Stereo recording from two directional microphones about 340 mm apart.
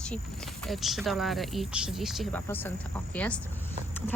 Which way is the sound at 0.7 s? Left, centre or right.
Centre.